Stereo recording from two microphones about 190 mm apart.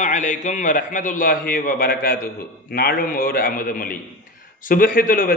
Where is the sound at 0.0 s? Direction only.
40° left (ahead or behind).